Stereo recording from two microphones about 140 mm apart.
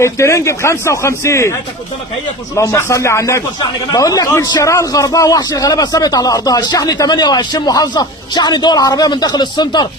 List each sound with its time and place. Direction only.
0.0 s a man's voice: 20° left (ahead or behind)
2.6 s a man's voice: 20° left (ahead or behind)